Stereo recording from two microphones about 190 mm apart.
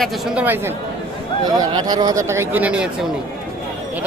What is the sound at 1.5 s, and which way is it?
Speech, 20° right (ahead or behind).